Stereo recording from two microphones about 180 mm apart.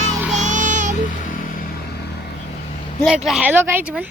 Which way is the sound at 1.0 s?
50° left (ahead or behind).